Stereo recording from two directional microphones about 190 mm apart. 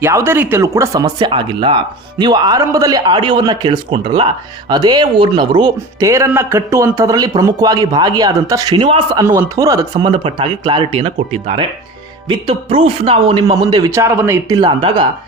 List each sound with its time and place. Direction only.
0.0 s speech: 15° right (ahead or behind)